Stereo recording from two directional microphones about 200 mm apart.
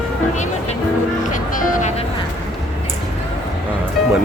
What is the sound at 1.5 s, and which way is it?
Music, 35° left (ahead or behind).